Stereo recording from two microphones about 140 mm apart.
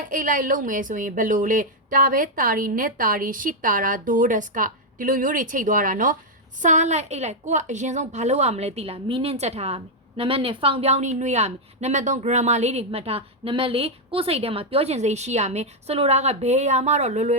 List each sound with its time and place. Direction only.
0.1 s a woman's voice: 75° right (ahead or behind)
6.6 s a woman's voice: 60° right (ahead or behind)